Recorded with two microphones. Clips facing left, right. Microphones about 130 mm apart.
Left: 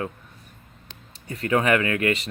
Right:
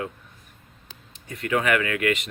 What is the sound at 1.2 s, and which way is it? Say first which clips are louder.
Speech: left 2 dB; 35° left (ahead or behind).